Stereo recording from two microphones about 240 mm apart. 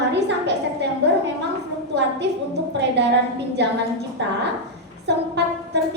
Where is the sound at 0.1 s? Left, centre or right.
Right.